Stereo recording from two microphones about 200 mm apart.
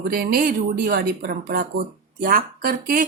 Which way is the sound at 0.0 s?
50° right (ahead or behind).